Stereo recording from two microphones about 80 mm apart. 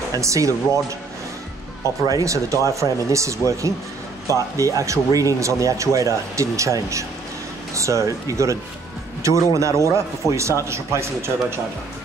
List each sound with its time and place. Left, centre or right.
0.1 s speech: right
2.0 s speech: right